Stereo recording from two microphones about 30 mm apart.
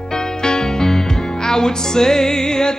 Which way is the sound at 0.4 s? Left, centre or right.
Left.